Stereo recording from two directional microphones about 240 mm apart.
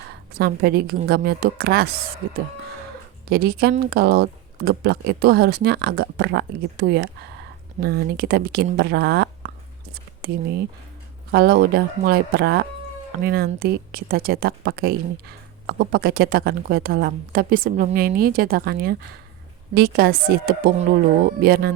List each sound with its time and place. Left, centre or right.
0.3 s speech: right
9.9 s a sound: right
11.3 s speech: right